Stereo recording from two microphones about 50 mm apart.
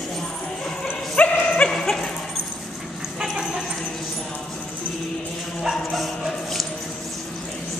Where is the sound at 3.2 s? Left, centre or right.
Centre.